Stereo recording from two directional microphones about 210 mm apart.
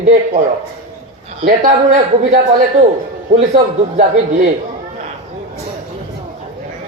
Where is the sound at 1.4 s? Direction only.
40° right (ahead or behind).